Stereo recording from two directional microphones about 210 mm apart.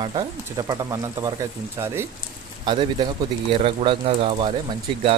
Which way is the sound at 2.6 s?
25° right (ahead or behind).